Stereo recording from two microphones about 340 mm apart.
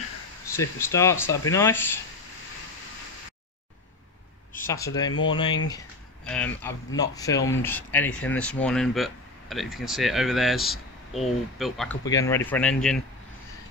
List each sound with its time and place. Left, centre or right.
0.6 s speech: centre
4.5 s speech: centre
6.2 s speech: centre